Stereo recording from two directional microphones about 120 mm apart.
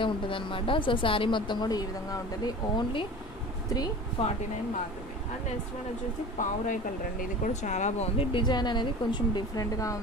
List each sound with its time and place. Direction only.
0.0 s speech: 45° left (ahead or behind)
4.2 s speech: 55° left (ahead or behind)
6.3 s speech: 90° left
8.2 s speech: 45° left (ahead or behind)